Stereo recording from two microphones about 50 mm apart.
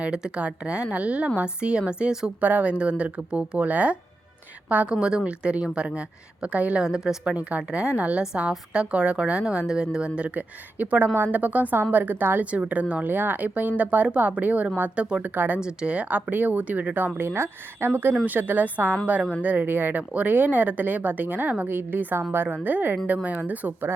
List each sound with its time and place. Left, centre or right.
0.0 s a woman's voice: centre
2.4 s a woman's voice: right
4.9 s a woman's voice: centre
6.8 s a woman's voice: centre
7.3 s a woman's voice: right
12.5 s a woman's voice: right
13.1 s a woman's voice: right
17.2 s speech: right
18.3 s speech: right